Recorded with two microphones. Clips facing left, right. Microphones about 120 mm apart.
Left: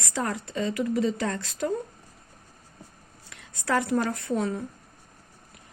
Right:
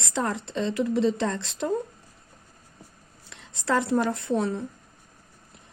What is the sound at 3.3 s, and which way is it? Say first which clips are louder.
Speech: right 1 dB; 25° right (ahead or behind).